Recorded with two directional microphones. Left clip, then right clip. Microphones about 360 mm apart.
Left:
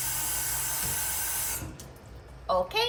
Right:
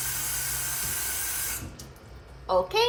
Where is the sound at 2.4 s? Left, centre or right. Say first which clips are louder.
Right 3 dB; centre.